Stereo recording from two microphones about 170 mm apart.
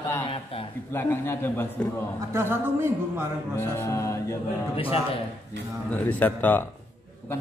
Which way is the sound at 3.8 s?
15° left (ahead or behind).